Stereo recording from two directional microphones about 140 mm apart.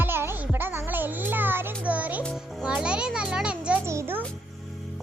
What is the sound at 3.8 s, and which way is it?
Speech, 20° right (ahead or behind).